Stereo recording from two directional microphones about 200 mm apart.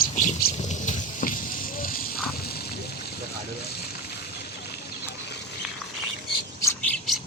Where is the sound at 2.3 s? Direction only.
50° left (ahead or behind).